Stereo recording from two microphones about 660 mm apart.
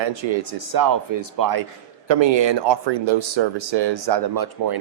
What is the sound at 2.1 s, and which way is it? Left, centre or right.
Speech, right.